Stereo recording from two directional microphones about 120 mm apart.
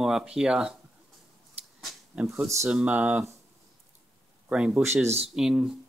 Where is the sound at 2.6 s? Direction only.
10° right (ahead or behind).